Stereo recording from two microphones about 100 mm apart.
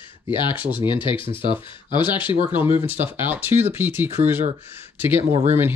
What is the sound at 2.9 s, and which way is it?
Speech, 20° right (ahead or behind).